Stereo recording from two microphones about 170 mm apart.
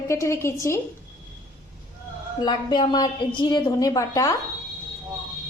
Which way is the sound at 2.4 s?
25° left (ahead or behind).